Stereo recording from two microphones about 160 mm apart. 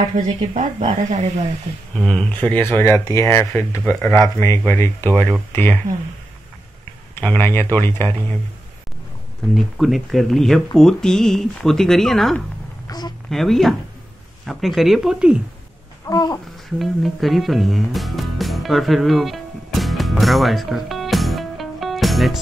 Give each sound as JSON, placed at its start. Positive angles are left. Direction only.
{"t": 0.4, "sound": "speech", "side_deg": -45}
{"t": 2.0, "sound": "speech", "side_deg": 5}
{"t": 7.2, "sound": "speech", "side_deg": 15}
{"t": 9.8, "sound": "speech", "side_deg": 0}
{"t": 12.8, "sound": "a sound", "side_deg": 25}
{"t": 13.3, "sound": "speech", "side_deg": 0}
{"t": 16.1, "sound": "a sound", "side_deg": 25}
{"t": 16.7, "sound": "music", "side_deg": 0}